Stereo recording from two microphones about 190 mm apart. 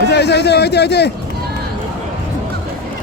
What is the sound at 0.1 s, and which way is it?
A man's voice, 60° left (ahead or behind).